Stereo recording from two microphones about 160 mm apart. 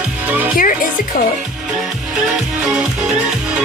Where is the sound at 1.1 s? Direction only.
65° left (ahead or behind).